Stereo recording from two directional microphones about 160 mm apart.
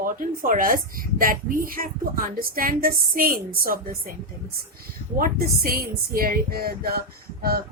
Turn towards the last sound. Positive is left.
turn(degrees=-70)  # may be behind; listen again after turning